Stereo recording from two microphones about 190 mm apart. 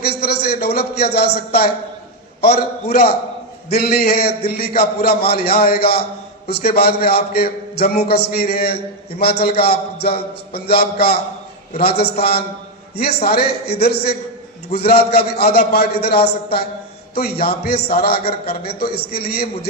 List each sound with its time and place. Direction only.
0.0 s a man's voice: 55° left (ahead or behind)